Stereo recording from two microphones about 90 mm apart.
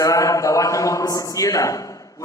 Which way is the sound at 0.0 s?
35° left (ahead or behind).